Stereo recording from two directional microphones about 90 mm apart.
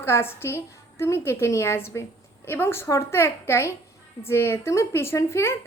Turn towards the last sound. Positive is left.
turn(degrees=30)  # may be behind; listen again after turning